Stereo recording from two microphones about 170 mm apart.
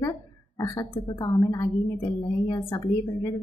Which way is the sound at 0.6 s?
20° left (ahead or behind).